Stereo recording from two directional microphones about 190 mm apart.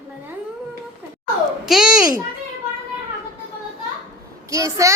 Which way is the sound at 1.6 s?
5° right (ahead or behind).